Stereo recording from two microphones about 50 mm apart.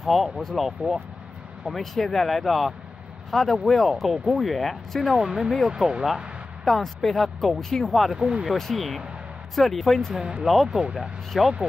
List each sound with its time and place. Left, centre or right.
0.0 s speech: centre
5.1 s speech: centre
6.6 s speech: centre
8.2 s speech: centre
8.5 s speech: centre
10.1 s speech: right
10.4 s speech: centre
10.7 s speech: centre
11.3 s speech: centre